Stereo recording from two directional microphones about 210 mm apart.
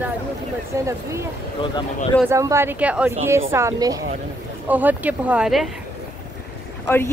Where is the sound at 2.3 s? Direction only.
15° right (ahead or behind).